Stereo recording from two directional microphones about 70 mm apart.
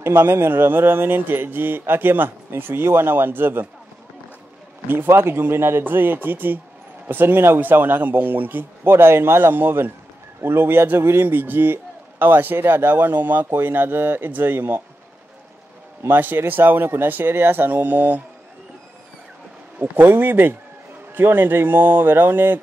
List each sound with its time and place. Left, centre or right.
0.0 s a man's voice: right
4.8 s a man's voice: right
16.0 s speech: right
19.8 s speech: right